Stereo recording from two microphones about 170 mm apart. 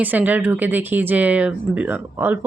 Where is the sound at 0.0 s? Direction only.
10° right (ahead or behind).